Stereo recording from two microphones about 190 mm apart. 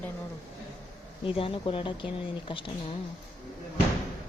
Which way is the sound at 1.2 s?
30° left (ahead or behind).